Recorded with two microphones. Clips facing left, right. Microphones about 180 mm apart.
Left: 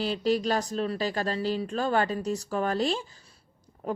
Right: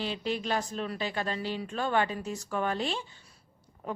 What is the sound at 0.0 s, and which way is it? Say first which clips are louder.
Speech: left 6 dB; 40° left (ahead or behind).